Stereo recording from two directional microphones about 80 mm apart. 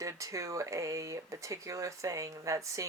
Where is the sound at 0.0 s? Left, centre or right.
Right.